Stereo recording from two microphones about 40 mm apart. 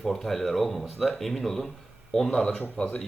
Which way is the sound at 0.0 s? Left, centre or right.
Centre.